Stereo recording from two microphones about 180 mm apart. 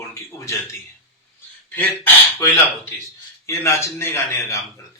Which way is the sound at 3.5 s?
15° left (ahead or behind).